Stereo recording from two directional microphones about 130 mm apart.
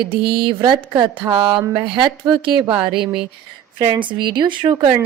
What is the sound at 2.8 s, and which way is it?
A woman's voice, 40° right (ahead or behind).